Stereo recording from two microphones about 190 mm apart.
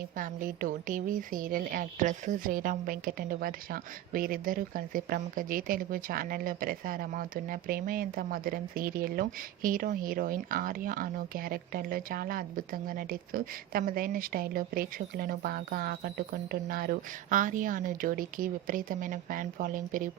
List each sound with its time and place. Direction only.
0.2 s a woman's voice: 45° right (ahead or behind)